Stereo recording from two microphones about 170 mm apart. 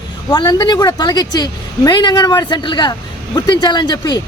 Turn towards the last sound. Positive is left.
turn(degrees=25)  # may be behind; listen again after turning